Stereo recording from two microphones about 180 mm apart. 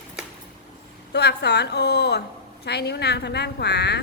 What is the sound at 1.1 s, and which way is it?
A woman's voice, 65° left (ahead or behind).